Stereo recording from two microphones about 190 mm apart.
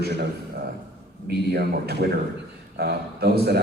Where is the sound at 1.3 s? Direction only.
60° right (ahead or behind).